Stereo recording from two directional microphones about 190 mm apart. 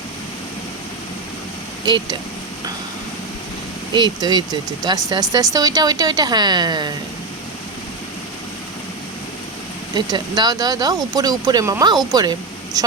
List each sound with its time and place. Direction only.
1.8 s speech: 20° right (ahead or behind)
3.9 s speech: 20° right (ahead or behind)
9.9 s speech: 20° right (ahead or behind)